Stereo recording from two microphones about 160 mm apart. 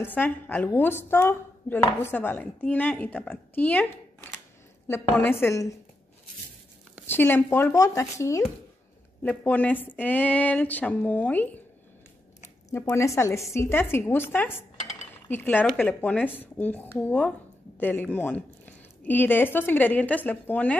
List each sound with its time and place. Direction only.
0.0 s speech: 10° left (ahead or behind)
7.1 s speech: 15° left (ahead or behind)
12.7 s speech: 15° left (ahead or behind)